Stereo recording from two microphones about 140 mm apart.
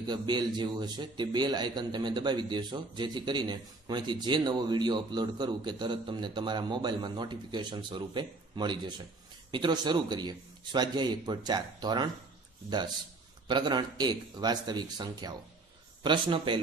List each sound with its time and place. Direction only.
0.0 s a man's voice: 30° right (ahead or behind)